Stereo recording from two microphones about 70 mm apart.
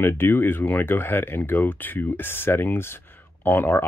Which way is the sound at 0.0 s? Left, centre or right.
Left.